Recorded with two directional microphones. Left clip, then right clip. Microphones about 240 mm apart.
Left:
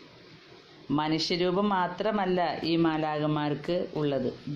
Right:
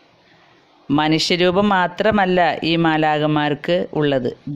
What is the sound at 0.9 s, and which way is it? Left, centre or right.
Speech, right.